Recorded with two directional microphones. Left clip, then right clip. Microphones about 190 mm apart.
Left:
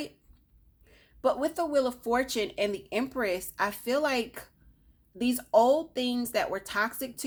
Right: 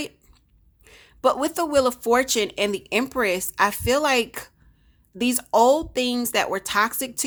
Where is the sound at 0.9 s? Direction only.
40° right (ahead or behind).